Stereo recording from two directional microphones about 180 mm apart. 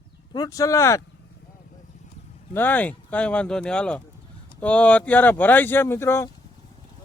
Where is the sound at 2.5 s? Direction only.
10° left (ahead or behind).